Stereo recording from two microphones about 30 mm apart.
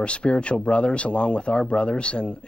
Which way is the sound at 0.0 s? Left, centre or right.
Left.